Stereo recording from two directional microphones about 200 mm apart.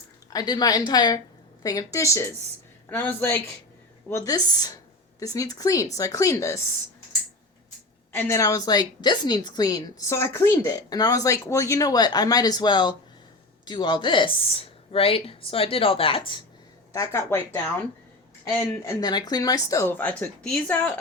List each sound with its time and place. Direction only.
0.3 s a woman's voice: 20° left (ahead or behind)
8.1 s a woman's voice: 10° left (ahead or behind)
16.9 s speech: 15° left (ahead or behind)